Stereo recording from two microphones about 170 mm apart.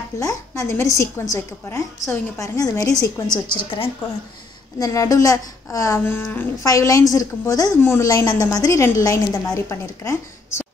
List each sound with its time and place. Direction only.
0.2 s a woman's voice: 20° left (ahead or behind)